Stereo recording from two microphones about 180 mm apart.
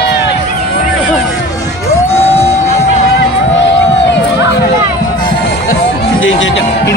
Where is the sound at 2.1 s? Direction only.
15° left (ahead or behind).